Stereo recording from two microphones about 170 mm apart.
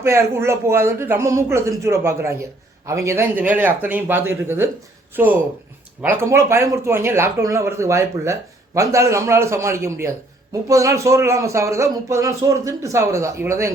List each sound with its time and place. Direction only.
0.0 s a man's voice: 15° right (ahead or behind)